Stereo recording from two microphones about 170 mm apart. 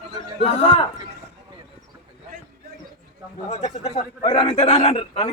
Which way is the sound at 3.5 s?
40° left (ahead or behind).